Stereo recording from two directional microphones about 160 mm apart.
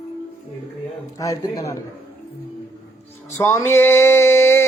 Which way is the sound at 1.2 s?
20° left (ahead or behind).